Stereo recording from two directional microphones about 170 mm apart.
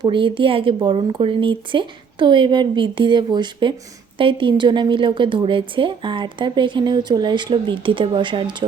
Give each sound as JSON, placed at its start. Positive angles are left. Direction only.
{"t": 0.0, "sound": "a woman's voice", "side_deg": -30}